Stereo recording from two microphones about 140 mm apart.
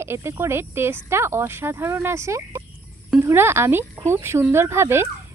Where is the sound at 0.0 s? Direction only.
20° right (ahead or behind).